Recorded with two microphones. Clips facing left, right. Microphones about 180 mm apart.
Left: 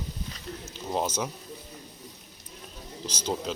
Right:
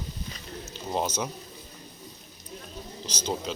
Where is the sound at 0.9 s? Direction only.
Centre (ahead or behind).